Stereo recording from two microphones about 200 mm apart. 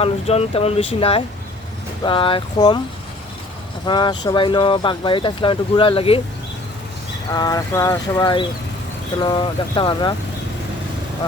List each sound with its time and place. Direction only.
0.0 s speech: 30° left (ahead or behind)
3.8 s speech: 25° left (ahead or behind)
7.3 s speech: 20° left (ahead or behind)